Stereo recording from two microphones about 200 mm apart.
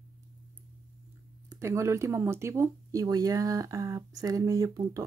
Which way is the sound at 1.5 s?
15° right (ahead or behind).